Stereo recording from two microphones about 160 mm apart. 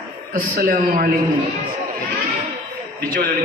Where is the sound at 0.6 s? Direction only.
65° right (ahead or behind).